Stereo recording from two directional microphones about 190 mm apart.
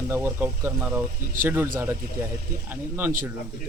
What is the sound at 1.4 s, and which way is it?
Speech, 45° right (ahead or behind).